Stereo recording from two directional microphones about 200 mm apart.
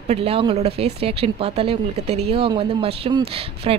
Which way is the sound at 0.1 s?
30° right (ahead or behind).